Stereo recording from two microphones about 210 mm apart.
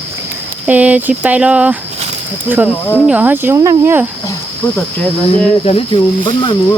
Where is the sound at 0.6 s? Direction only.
5° right (ahead or behind).